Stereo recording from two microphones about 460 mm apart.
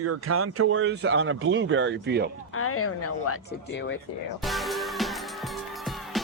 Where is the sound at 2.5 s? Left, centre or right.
Left.